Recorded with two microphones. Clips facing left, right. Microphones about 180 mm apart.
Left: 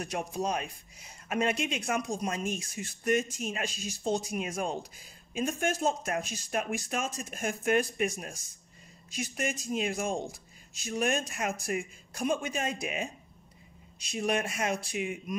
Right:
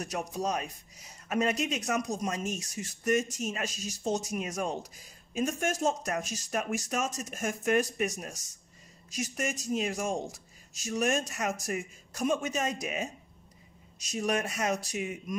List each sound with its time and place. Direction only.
0.0 s speech: 40° right (ahead or behind)